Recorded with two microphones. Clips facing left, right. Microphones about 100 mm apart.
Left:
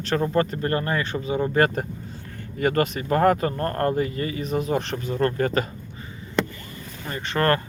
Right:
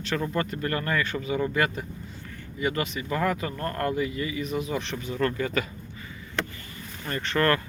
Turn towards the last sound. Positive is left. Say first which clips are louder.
# even
turn(degrees=15)  # may be behind; listen again after turning